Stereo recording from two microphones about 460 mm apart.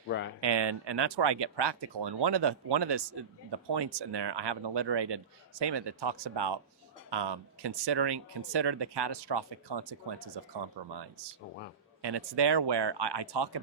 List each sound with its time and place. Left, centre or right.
0.1 s speech: left
0.4 s speech: right